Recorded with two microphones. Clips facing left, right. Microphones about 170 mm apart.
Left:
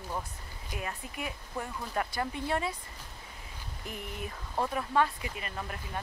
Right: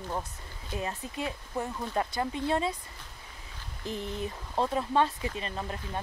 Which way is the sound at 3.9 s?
30° right (ahead or behind).